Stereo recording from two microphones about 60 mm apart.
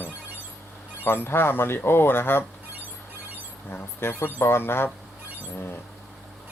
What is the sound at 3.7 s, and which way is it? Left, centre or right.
Speech, left.